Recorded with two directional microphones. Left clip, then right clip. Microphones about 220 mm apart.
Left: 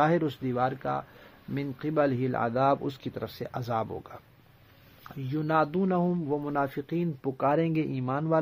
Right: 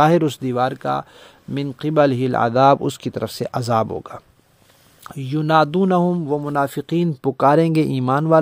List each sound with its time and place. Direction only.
0.0 s a man's voice: 45° right (ahead or behind)